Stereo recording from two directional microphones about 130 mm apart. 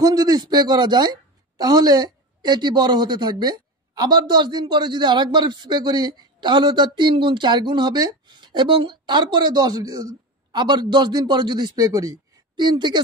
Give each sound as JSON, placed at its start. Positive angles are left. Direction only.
{"t": 0.0, "sound": "speech", "side_deg": -30}